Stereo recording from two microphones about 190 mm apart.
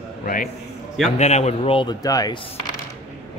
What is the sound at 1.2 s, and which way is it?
Speech, 35° left (ahead or behind).